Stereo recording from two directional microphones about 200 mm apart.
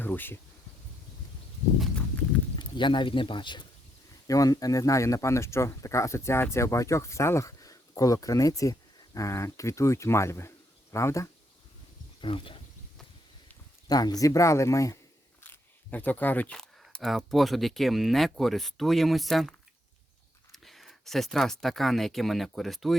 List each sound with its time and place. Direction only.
0.0 s speech: 10° left (ahead or behind)
2.6 s speech: 25° left (ahead or behind)
12.2 s speech: 25° left (ahead or behind)
13.8 s speech: 20° left (ahead or behind); by 23.0 s centre (ahead or behind)